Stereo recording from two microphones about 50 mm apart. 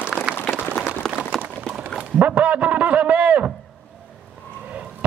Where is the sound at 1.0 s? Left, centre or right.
Centre.